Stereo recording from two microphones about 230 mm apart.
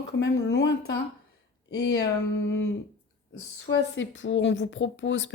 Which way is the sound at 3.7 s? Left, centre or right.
Left.